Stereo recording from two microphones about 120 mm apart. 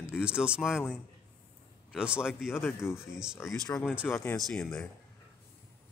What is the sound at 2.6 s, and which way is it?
Speech, 20° left (ahead or behind).